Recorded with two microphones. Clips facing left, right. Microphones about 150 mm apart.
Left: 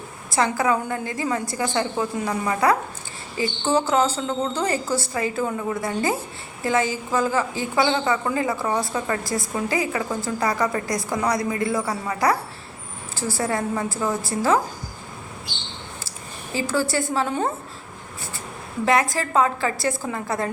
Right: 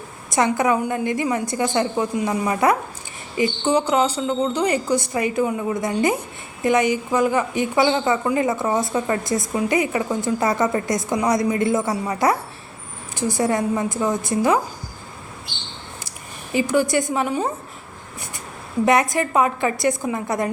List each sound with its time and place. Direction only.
0.3 s a woman's voice: 20° right (ahead or behind)
16.6 s a woman's voice: 20° right (ahead or behind)
18.9 s a woman's voice: 20° right (ahead or behind)